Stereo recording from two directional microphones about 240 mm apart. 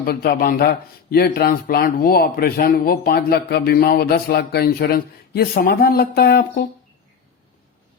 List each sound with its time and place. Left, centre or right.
0.0 s speech: left